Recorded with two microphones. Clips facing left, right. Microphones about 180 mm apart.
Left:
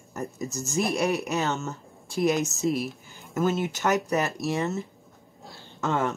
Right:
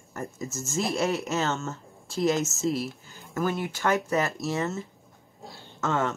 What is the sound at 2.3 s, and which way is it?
Speech, centre (ahead or behind).